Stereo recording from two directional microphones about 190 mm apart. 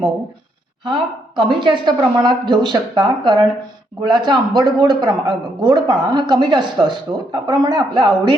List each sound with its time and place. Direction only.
1.4 s a man's voice: 25° right (ahead or behind)